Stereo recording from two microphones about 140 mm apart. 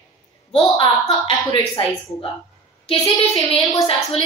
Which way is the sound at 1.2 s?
35° left (ahead or behind).